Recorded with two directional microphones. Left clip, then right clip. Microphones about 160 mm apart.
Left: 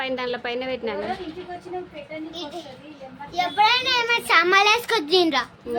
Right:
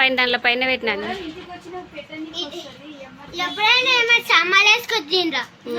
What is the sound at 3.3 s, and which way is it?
A child's voice, 90° left.